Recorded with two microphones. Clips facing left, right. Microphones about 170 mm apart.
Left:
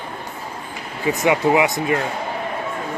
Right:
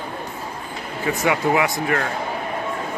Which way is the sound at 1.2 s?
20° left (ahead or behind).